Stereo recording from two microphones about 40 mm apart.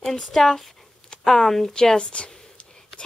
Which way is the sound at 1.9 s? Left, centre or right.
Left.